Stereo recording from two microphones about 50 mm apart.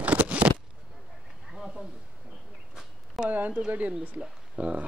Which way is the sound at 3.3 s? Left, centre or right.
Right.